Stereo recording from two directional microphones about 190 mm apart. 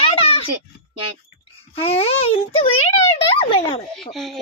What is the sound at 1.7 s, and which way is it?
A child's voice, 30° left (ahead or behind).